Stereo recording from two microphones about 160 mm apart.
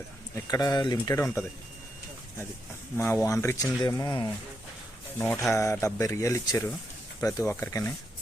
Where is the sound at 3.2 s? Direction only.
20° left (ahead or behind).